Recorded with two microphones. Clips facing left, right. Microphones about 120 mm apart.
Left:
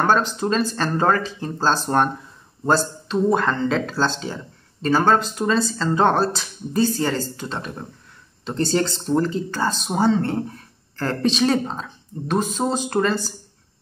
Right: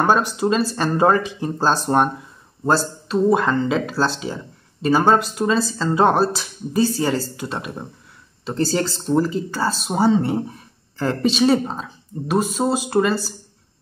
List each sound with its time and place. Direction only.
0.0 s speech: 10° right (ahead or behind)